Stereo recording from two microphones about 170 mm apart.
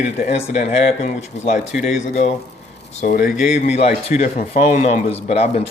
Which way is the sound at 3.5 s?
40° left (ahead or behind).